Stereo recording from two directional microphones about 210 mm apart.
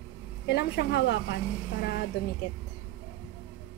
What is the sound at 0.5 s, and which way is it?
Speech, 55° left (ahead or behind).